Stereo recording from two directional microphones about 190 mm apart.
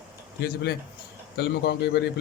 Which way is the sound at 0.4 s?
60° left (ahead or behind).